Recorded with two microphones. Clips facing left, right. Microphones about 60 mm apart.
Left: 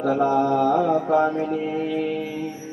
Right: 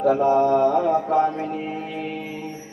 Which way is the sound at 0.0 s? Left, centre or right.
Right.